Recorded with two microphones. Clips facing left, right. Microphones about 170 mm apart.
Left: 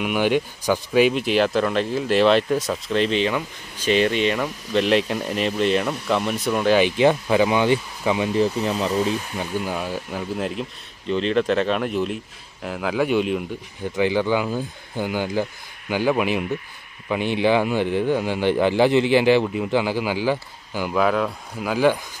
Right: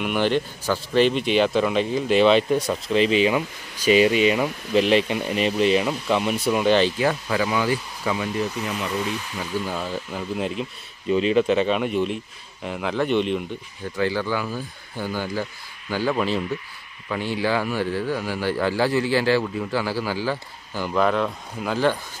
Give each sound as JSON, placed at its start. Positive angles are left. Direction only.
{"t": 0.0, "sound": "speech", "side_deg": 10}
{"t": 6.8, "sound": "speech", "side_deg": 20}
{"t": 9.7, "sound": "speech", "side_deg": 10}
{"t": 13.9, "sound": "speech", "side_deg": 20}